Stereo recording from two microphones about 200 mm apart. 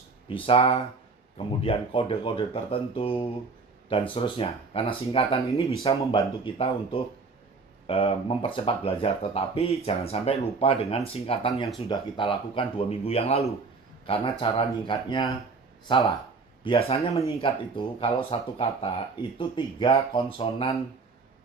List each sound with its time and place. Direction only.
0.3 s speech: 25° left (ahead or behind)
16.6 s speech: 30° left (ahead or behind)